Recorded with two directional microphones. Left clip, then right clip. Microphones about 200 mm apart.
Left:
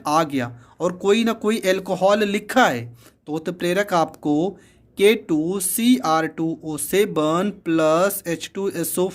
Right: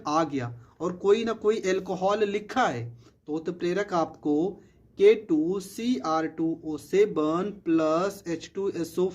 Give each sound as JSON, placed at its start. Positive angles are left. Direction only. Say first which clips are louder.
{"t": 0.0, "sound": "speech", "louder": "left 6 dB", "side_deg": 30}